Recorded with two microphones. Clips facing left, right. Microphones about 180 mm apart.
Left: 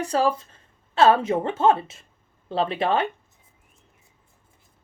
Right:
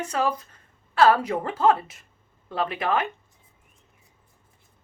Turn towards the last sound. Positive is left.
turn(degrees=30)  # may be behind; listen again after turning